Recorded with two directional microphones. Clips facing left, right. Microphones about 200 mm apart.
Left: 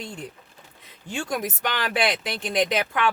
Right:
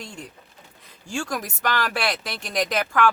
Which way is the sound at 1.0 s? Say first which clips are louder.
Right 2 dB; 20° left (ahead or behind).